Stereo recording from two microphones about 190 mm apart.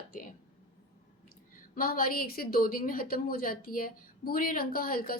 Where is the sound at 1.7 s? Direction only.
50° left (ahead or behind).